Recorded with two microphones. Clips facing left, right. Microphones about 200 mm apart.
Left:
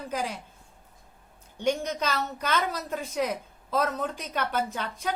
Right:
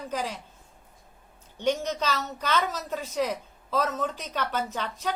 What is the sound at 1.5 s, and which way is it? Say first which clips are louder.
A woman's voice: even; 10° left (ahead or behind).